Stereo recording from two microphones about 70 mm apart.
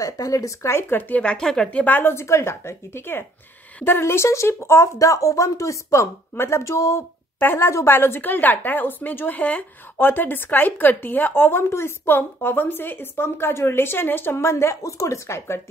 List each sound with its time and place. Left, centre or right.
0.0 s speech: left
0.6 s speech: left
1.2 s speech: centre
1.7 s speech: left